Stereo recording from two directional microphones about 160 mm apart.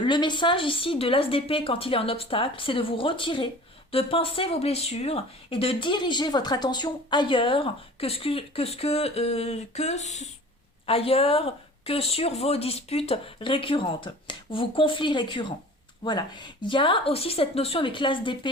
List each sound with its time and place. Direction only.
0.0 s speech: 30° left (ahead or behind)